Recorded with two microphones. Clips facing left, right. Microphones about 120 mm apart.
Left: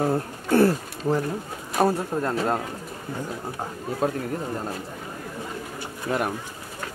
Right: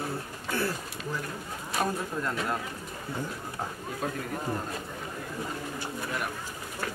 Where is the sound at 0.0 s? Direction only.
45° left (ahead or behind).